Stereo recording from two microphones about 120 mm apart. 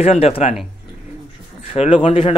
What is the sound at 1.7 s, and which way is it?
Speech, 50° left (ahead or behind).